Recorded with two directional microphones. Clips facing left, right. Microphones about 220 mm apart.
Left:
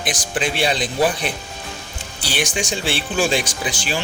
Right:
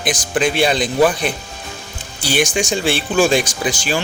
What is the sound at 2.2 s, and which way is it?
Speech, 45° right (ahead or behind).